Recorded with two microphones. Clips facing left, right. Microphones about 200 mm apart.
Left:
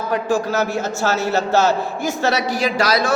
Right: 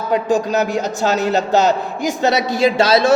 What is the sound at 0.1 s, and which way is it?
A man's voice, 20° right (ahead or behind).